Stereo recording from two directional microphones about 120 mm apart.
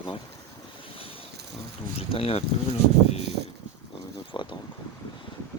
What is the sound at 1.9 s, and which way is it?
Speech, 55° left (ahead or behind).